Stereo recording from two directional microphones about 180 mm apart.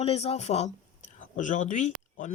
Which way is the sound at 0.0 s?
35° left (ahead or behind).